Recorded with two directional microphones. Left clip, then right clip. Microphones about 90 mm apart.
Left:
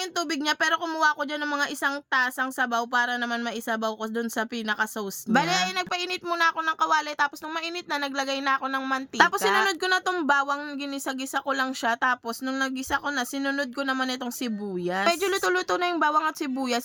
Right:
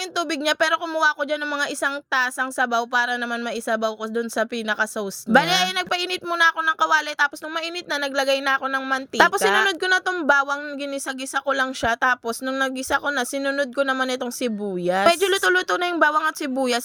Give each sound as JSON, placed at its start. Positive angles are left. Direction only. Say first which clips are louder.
{"t": 0.2, "sound": "speech", "louder": "right 5 dB", "side_deg": -35}
{"t": 3.2, "sound": "speech", "louder": "right 2 dB", "side_deg": -20}
{"t": 3.4, "sound": "speech", "louder": "right 5 dB", "side_deg": -30}
{"t": 5.3, "sound": "speech", "louder": "right 6 dB", "side_deg": -50}
{"t": 12.5, "sound": "speech", "louder": "right 5 dB", "side_deg": -55}
{"t": 13.4, "sound": "speech", "louder": "right 6 dB", "side_deg": -30}
{"t": 14.0, "sound": "speech", "louder": "right 6 dB", "side_deg": -45}